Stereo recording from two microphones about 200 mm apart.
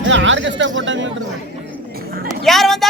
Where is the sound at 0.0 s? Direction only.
70° right (ahead or behind).